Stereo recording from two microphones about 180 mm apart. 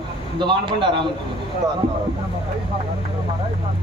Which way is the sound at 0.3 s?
25° right (ahead or behind).